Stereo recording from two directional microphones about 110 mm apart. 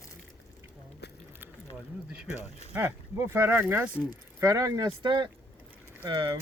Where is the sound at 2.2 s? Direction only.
90° left.